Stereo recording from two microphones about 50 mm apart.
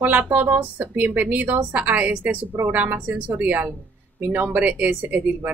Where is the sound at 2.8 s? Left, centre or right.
Right.